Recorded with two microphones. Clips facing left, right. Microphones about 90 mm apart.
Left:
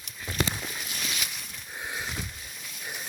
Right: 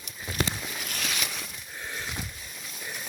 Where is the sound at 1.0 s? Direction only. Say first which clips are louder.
Right 4 dB; 90° right.